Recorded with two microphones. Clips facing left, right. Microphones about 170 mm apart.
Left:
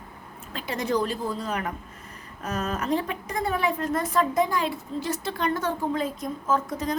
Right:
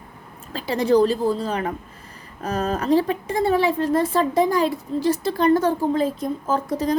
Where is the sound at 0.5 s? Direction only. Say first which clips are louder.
Right 8 dB; 30° right (ahead or behind).